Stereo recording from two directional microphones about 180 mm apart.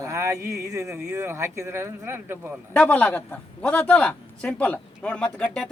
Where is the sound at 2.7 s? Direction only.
5° left (ahead or behind).